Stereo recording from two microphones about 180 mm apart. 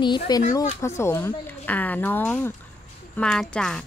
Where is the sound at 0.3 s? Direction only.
25° left (ahead or behind).